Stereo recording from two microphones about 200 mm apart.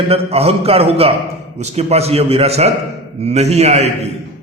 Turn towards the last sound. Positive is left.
turn(degrees=-30)  # may be behind; listen again after turning